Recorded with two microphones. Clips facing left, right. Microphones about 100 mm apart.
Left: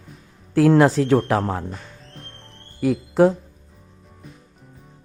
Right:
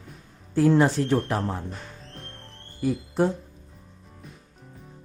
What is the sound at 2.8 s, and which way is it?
Speech, 90° left.